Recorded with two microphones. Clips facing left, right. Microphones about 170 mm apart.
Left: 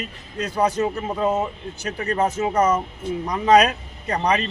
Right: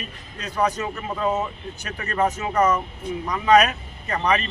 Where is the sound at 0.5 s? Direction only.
35° left (ahead or behind).